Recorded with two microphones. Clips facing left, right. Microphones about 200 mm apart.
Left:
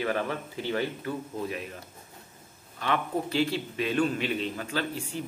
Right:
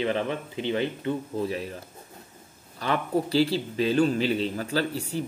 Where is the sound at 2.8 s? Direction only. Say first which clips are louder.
Right 3 dB; 35° right (ahead or behind).